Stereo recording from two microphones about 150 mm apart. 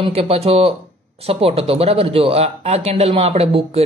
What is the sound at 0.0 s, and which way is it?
Speech, 40° right (ahead or behind).